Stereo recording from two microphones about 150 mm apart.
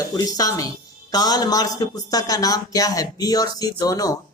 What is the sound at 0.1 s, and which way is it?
Speech, 25° left (ahead or behind).